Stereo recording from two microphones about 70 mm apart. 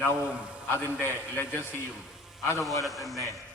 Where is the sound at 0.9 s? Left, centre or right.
Left.